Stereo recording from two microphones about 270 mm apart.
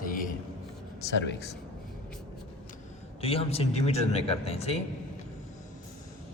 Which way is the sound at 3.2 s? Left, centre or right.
Left.